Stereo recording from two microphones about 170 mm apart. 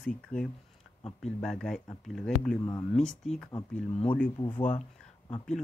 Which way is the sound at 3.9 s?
35° left (ahead or behind).